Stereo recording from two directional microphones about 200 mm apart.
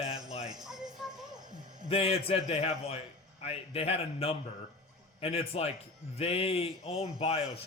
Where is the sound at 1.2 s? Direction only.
20° right (ahead or behind).